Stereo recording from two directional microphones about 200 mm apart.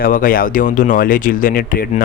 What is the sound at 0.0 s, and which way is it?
Speech, 45° left (ahead or behind).